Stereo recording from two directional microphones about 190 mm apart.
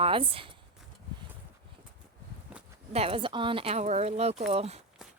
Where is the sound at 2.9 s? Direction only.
30° right (ahead or behind).